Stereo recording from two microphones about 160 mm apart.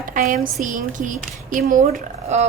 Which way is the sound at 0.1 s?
55° right (ahead or behind).